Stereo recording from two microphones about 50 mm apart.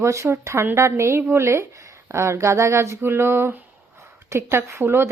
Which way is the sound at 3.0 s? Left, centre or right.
Right.